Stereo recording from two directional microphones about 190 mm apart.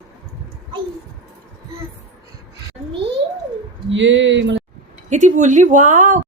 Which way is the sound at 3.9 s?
75° right (ahead or behind).